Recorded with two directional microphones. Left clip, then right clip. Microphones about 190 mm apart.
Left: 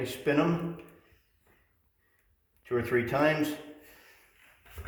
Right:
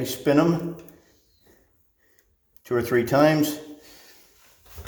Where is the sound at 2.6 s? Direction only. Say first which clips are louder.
Right 6 dB; 50° right (ahead or behind).